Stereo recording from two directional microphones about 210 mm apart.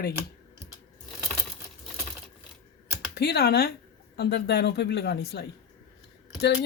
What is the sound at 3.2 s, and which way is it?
Speech, 50° left (ahead or behind).